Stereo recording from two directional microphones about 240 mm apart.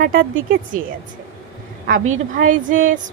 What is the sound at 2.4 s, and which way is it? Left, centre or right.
Speech, right.